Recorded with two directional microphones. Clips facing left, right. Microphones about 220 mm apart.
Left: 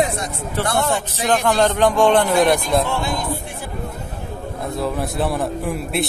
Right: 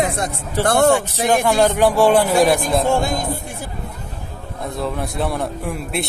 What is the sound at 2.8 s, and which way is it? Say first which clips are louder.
Speech: right 4 dB; 45° right (ahead or behind).